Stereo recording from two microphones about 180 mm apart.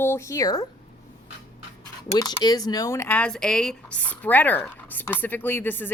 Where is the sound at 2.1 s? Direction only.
20° left (ahead or behind).